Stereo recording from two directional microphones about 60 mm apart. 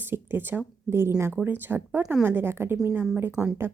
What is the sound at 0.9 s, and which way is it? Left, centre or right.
Speech, right.